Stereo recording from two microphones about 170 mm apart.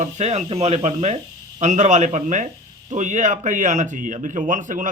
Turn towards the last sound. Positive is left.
turn(degrees=-50)  # may be behind; listen again after turning